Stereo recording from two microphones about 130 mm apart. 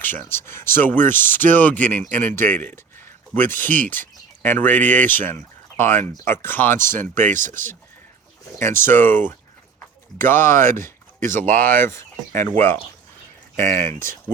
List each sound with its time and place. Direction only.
0.3 s speech: 20° left (ahead or behind)
7.3 s speech: 90° right
8.5 s speech: 20° left (ahead or behind)